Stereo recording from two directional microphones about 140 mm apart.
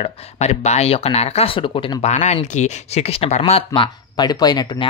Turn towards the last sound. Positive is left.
turn(degrees=30)  # may be behind; listen again after turning